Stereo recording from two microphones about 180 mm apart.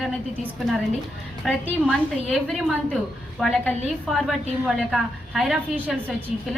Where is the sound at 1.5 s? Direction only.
10° left (ahead or behind).